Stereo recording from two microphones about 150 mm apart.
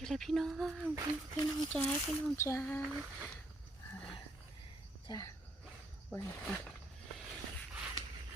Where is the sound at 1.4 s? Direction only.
25° left (ahead or behind).